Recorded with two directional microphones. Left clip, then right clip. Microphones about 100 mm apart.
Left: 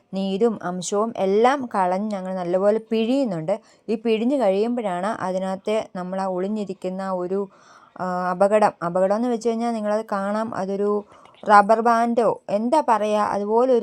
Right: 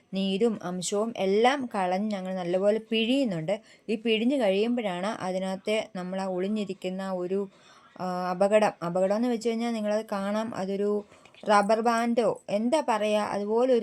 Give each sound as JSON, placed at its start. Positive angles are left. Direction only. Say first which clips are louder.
{"t": 0.1, "sound": "a woman's voice", "louder": "left 5 dB", "side_deg": 30}